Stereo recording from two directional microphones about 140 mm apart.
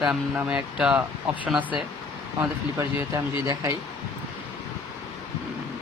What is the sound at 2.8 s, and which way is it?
Speech, 20° right (ahead or behind).